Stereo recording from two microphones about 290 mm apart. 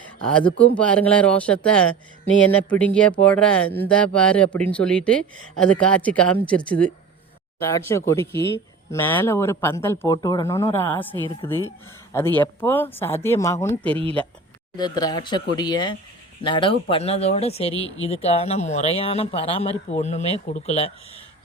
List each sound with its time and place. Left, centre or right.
0.8 s speech: centre
14.8 s speech: centre